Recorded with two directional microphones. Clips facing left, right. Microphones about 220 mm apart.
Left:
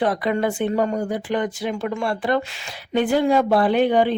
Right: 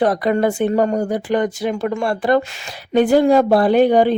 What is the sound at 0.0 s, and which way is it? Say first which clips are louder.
Speech: right 5 dB; 40° right (ahead or behind).